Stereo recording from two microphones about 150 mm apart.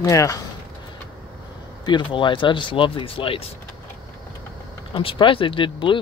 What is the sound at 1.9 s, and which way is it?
Speech, 30° left (ahead or behind).